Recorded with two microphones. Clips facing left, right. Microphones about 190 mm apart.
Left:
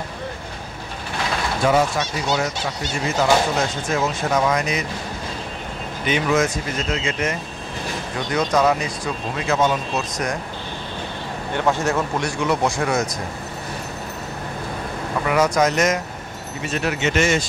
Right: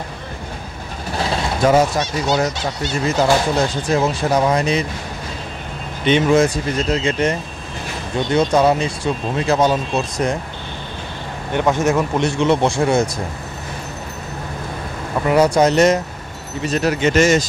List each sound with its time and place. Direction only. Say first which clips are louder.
1.1 s vehicle: right 3 dB; 40° right (ahead or behind)
3.2 s speech: right 2 dB; 35° right (ahead or behind)
6.0 s speech: right 6 dB; 30° right (ahead or behind)
11.5 s speech: right 4 dB; 20° right (ahead or behind)
15.2 s speech: right 5 dB; 30° right (ahead or behind)